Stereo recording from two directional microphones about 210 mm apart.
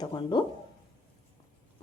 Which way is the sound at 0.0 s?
20° left (ahead or behind).